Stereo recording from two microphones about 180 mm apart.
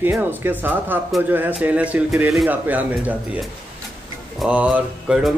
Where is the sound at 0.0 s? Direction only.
10° right (ahead or behind).